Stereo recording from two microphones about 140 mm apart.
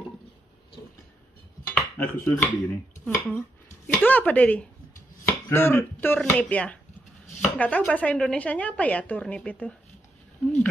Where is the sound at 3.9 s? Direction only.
10° left (ahead or behind).